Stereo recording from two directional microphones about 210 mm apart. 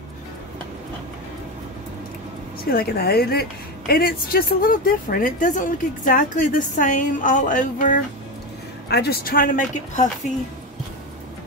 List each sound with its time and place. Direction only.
2.7 s a woman's voice: 45° left (ahead or behind)
8.8 s speech: 50° left (ahead or behind)